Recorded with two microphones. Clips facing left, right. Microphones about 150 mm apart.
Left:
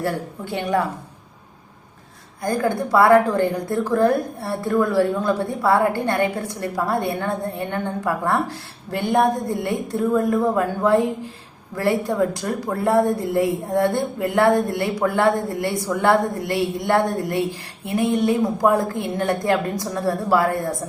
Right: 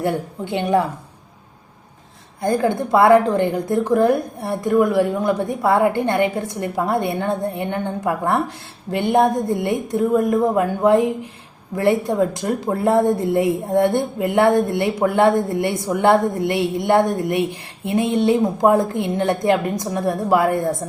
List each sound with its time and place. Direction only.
0.0 s a woman's voice: 20° right (ahead or behind)
2.4 s a woman's voice: 25° right (ahead or behind)